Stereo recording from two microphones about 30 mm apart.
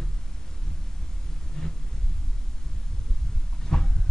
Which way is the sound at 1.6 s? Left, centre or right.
Left.